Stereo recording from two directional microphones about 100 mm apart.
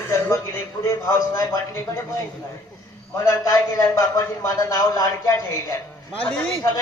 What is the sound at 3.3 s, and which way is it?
A man's voice, 35° left (ahead or behind).